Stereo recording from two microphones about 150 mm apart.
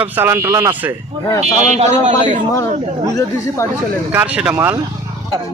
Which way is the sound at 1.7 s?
50° right (ahead or behind).